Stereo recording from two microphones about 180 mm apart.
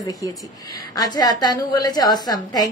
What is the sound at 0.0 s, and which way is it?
A woman's voice, 20° left (ahead or behind).